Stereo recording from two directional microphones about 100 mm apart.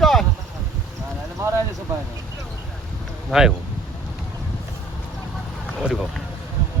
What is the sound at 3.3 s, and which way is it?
Speech, 5° right (ahead or behind).